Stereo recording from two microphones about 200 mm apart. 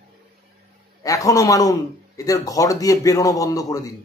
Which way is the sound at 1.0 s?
15° left (ahead or behind).